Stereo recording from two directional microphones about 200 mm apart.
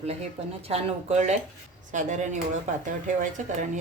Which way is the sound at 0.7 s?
30° right (ahead or behind).